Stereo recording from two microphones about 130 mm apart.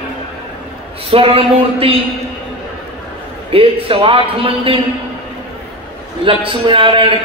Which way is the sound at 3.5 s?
45° right (ahead or behind).